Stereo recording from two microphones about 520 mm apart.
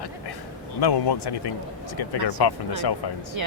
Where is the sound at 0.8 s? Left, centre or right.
Left.